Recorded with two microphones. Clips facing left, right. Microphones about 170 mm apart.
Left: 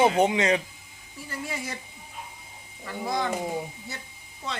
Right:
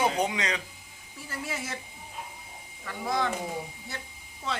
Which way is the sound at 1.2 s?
Centre (ahead or behind).